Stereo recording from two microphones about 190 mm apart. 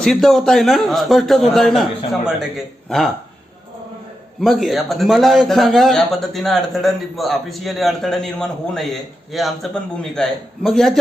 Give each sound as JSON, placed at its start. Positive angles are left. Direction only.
{"t": 0.0, "sound": "a man's voice", "side_deg": 0}
{"t": 4.4, "sound": "a man's voice", "side_deg": 0}